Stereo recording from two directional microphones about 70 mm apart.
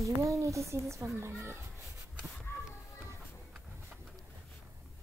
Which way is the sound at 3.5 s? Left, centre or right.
Centre.